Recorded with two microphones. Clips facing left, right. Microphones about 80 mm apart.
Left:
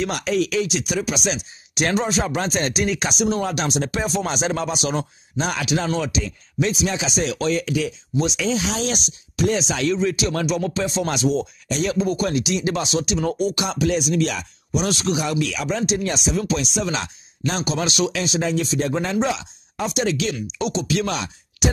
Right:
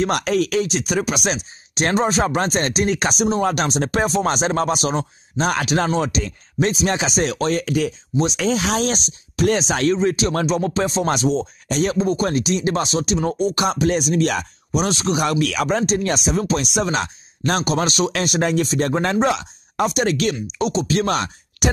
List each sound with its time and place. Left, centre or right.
0.0 s speech: right
8.9 s speech: right
14.9 s speech: right
15.1 s speech: right
18.1 s speech: right
20.5 s speech: right